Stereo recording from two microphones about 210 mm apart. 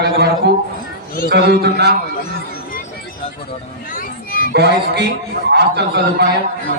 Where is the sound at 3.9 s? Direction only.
45° left (ahead or behind).